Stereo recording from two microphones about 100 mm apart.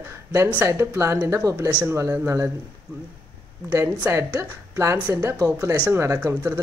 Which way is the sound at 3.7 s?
25° right (ahead or behind).